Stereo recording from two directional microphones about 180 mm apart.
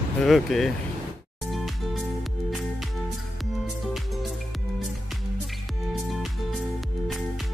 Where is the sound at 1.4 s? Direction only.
Centre (ahead or behind).